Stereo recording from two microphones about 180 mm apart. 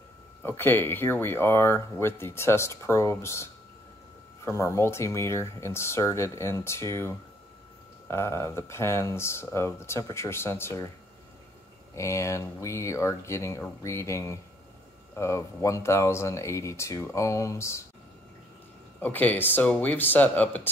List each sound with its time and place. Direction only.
0.4 s speech: 10° left (ahead or behind)
4.5 s speech: 15° left (ahead or behind)
11.9 s speech: 15° left (ahead or behind)
18.9 s speech: 10° left (ahead or behind)